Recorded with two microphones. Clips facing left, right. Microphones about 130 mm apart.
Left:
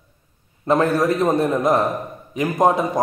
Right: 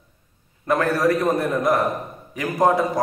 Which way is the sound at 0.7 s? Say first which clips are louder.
Left 2 dB; 25° left (ahead or behind).